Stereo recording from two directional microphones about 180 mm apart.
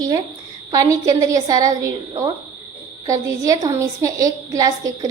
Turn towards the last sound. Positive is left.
turn(degrees=-20)  # may be behind; listen again after turning